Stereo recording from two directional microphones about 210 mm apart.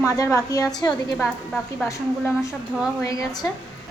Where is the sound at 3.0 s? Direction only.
15° left (ahead or behind).